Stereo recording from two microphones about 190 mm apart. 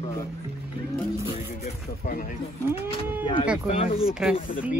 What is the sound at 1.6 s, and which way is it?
Speech, 45° left (ahead or behind).